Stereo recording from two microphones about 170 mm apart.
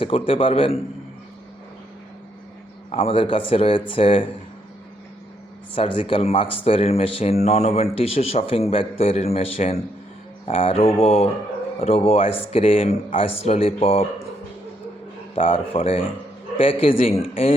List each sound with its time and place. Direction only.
0.0 s speech: 35° left (ahead or behind)
2.9 s speech: 35° left (ahead or behind)
5.7 s speech: 30° left (ahead or behind)
15.4 s speech: 30° left (ahead or behind)